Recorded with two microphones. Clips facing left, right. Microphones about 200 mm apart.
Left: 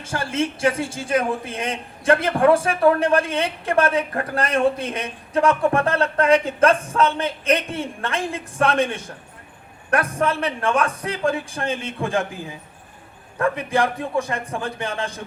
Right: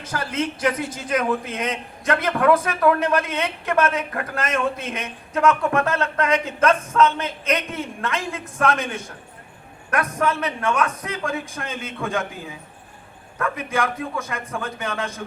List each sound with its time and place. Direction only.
0.0 s a man's voice: 30° left (ahead or behind)
13.4 s a man's voice: 30° left (ahead or behind)